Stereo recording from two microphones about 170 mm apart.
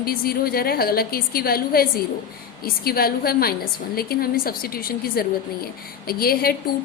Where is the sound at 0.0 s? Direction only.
60° left (ahead or behind).